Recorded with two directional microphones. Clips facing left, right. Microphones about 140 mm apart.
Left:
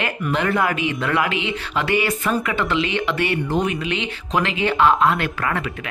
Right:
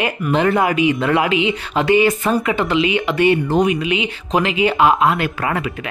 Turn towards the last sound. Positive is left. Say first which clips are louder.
# right 3 dB
turn(degrees=-15)  # may be behind; listen again after turning